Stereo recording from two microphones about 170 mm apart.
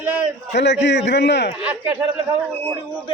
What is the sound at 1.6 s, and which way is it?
Speech, 10° right (ahead or behind).